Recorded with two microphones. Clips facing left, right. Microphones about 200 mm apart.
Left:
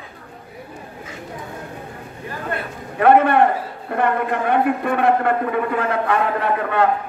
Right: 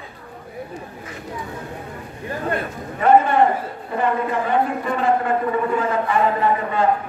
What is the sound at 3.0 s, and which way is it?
A man's voice, 60° left (ahead or behind).